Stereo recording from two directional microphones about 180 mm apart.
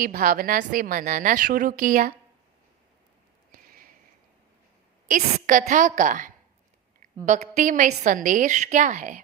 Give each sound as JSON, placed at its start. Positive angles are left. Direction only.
{"t": 0.0, "sound": "a woman's voice", "side_deg": -50}
{"t": 5.0, "sound": "a woman's voice", "side_deg": -45}